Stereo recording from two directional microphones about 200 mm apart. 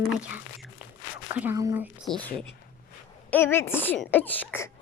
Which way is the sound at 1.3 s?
10° right (ahead or behind).